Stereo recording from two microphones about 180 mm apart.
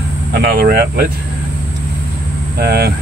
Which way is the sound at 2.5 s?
60° right (ahead or behind).